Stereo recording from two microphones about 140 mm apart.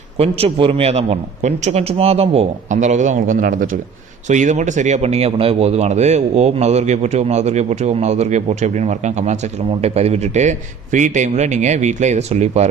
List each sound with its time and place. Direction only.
0.2 s speech: 45° right (ahead or behind)